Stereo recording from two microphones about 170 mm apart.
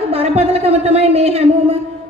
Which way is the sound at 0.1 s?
35° right (ahead or behind).